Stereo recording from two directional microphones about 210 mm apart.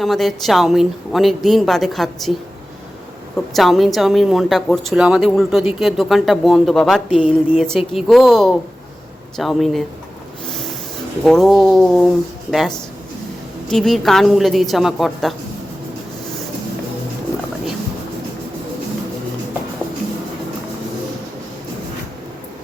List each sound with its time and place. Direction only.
0.0 s speech: centre (ahead or behind)
3.3 s speech: centre (ahead or behind)
10.5 s snort: centre (ahead or behind)
11.2 s speech: centre (ahead or behind)